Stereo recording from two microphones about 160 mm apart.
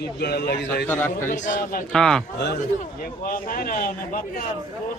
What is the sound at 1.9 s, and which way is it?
Speech, 5° left (ahead or behind).